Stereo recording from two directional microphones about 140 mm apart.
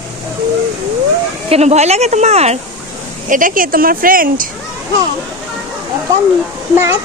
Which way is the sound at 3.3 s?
75° right (ahead or behind).